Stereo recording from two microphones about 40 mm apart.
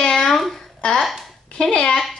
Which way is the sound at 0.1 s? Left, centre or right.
Centre.